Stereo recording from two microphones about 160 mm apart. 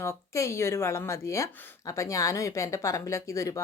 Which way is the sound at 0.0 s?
15° left (ahead or behind).